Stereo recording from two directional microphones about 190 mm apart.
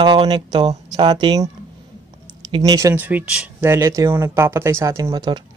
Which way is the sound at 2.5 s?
20° right (ahead or behind).